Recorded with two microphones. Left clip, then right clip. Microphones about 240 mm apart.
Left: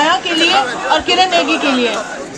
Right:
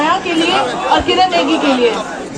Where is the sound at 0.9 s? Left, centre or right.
Left.